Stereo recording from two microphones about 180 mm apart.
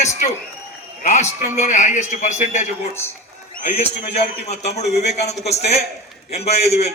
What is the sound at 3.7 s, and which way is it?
A man's voice, 35° left (ahead or behind).